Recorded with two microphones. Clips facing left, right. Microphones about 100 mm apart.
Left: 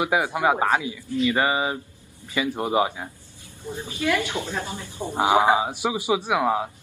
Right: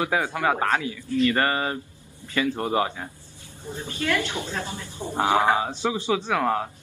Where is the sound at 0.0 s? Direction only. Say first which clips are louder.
Left 2 dB; 15° left (ahead or behind).